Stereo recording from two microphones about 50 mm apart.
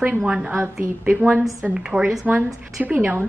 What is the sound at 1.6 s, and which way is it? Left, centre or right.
Speech, right.